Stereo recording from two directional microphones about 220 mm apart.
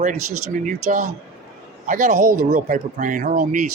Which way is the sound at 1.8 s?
35° right (ahead or behind).